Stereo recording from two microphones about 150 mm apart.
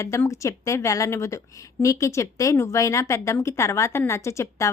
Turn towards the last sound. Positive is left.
turn(degrees=20)  # may be behind; listen again after turning